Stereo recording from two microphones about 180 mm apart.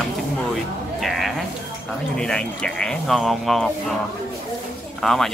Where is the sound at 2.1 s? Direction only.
5° left (ahead or behind).